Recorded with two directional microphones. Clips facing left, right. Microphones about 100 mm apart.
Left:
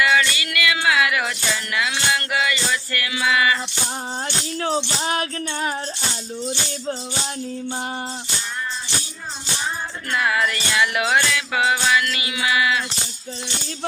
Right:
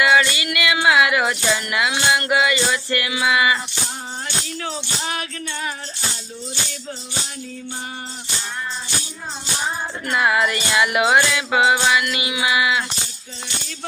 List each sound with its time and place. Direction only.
0.0 s music: 20° right (ahead or behind)
4.6 s speech: 35° left (ahead or behind)
10.1 s music: 20° right (ahead or behind)